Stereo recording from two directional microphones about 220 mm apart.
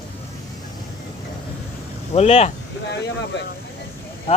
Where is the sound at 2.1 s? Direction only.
30° left (ahead or behind).